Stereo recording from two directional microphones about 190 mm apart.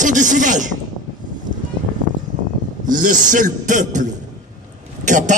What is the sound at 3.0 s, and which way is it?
A man's voice, 45° right (ahead or behind).